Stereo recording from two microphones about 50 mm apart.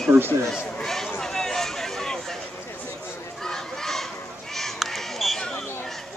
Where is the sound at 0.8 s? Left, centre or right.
Centre.